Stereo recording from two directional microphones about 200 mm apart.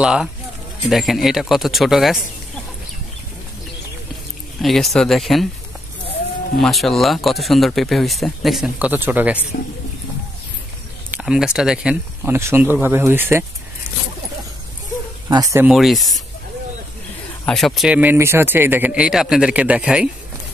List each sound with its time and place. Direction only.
0.0 s speech: 5° right (ahead or behind)
4.6 s speech: centre (ahead or behind)
6.6 s speech: centre (ahead or behind)
11.1 s speech: 5° right (ahead or behind)
15.2 s speech: 20° right (ahead or behind)
15.6 s speech: centre (ahead or behind)
17.5 s speech: centre (ahead or behind)